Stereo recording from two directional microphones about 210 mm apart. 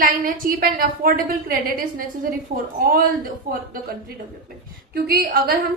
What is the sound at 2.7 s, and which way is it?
Speech, 45° right (ahead or behind).